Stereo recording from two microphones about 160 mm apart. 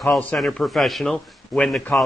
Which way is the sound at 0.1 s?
5° left (ahead or behind).